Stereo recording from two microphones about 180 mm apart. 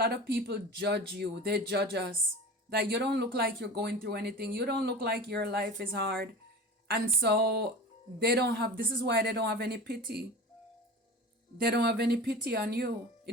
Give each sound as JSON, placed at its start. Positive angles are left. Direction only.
{"t": 0.0, "sound": "speech", "side_deg": -60}
{"t": 11.5, "sound": "speech", "side_deg": -60}